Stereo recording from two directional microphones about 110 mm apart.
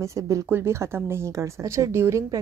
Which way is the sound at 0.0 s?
30° right (ahead or behind).